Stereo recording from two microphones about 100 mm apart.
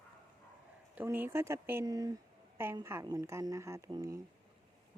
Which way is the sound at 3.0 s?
35° right (ahead or behind).